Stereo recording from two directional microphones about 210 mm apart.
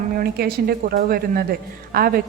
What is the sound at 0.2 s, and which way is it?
A woman's voice, 45° right (ahead or behind).